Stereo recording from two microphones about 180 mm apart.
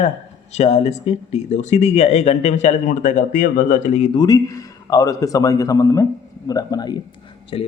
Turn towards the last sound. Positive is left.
turn(degrees=30)  # may be behind; listen again after turning